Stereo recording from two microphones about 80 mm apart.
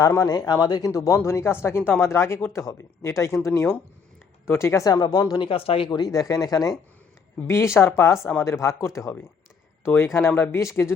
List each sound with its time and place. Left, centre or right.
0.0 s speech: left
4.9 s speech: left
5.3 s speech: left
6.1 s speech: left
7.4 s speech: left